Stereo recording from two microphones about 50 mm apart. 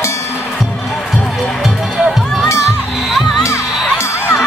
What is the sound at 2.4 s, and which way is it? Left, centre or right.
Music, left.